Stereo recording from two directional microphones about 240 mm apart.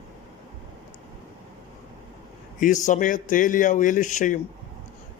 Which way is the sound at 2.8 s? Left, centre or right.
Left.